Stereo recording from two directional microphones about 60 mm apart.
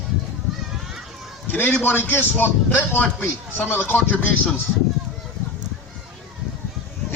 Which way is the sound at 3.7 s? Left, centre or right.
Left.